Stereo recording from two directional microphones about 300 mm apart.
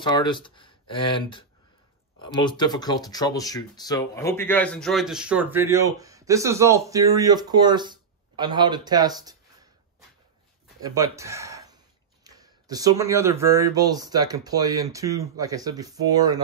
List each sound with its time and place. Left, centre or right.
0.0 s speech: centre
10.8 s speech: centre